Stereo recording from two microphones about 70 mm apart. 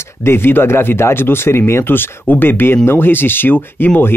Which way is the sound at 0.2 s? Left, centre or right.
Left.